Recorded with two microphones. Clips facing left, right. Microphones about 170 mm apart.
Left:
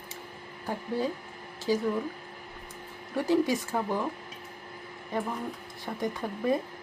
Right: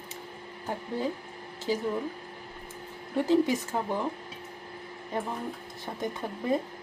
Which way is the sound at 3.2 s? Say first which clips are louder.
Right 1 dB; 20° right (ahead or behind).